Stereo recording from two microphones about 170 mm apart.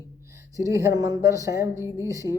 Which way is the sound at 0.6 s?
20° right (ahead or behind).